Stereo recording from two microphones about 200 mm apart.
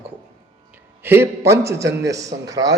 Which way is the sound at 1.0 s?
10° right (ahead or behind).